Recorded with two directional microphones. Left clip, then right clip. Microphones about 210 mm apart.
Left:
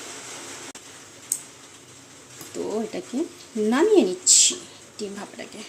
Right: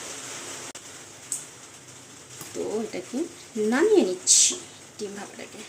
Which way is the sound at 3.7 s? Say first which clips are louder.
Left 2 dB; 15° left (ahead or behind).